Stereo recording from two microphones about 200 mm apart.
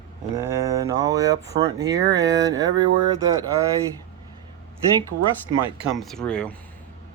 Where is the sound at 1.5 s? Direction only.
25° right (ahead or behind).